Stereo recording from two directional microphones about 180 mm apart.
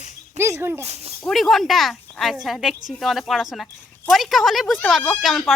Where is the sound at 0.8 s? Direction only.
35° right (ahead or behind).